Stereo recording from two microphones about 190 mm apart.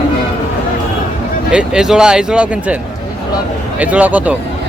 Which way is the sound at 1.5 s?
5° right (ahead or behind).